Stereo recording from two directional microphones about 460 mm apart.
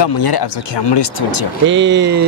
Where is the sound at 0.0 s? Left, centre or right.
Left.